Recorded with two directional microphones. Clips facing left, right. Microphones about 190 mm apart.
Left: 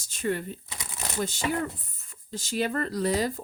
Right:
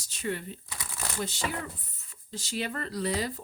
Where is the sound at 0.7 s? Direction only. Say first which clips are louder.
Left 1 dB; 20° left (ahead or behind).